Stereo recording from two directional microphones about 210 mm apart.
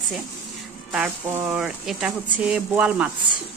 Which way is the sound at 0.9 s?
5° right (ahead or behind).